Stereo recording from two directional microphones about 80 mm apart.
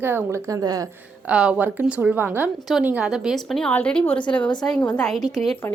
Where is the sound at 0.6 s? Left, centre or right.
Right.